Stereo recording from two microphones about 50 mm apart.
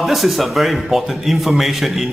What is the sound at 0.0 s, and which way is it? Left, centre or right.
A man's voice, centre.